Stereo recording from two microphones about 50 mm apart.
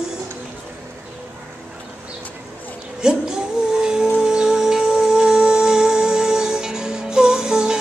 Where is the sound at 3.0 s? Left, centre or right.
Centre.